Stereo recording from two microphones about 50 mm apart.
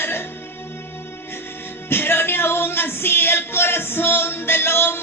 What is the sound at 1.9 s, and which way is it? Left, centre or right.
Music, left.